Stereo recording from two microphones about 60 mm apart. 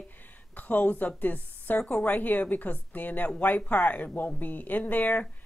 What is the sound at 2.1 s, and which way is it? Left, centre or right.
Speech, left.